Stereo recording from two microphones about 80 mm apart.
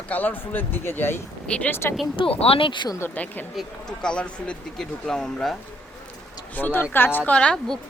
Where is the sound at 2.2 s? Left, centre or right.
Left.